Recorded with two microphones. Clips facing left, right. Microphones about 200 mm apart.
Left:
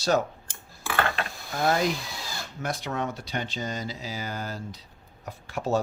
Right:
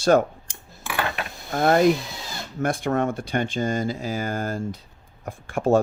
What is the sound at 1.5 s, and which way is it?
Speech, 50° right (ahead or behind).